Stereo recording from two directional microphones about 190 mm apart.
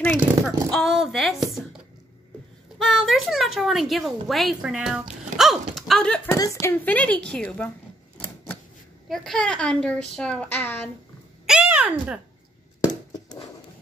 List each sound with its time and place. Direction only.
0.7 s a sound: centre (ahead or behind)
2.8 s speech: centre (ahead or behind)
6.3 s speech: 15° left (ahead or behind)
9.1 s speech: 5° left (ahead or behind)
11.4 s speech: 5° right (ahead or behind)
12.8 s a sound: 20° left (ahead or behind)